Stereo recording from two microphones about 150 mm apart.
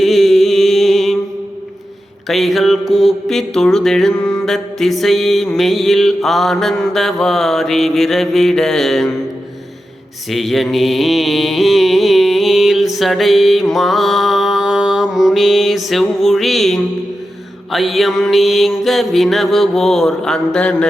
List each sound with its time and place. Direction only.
0.0 s mantra: centre (ahead or behind)
2.2 s mantra: centre (ahead or behind)
10.2 s mantra: centre (ahead or behind)